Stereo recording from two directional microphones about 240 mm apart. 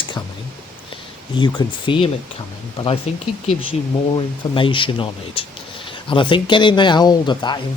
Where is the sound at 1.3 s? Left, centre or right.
Centre.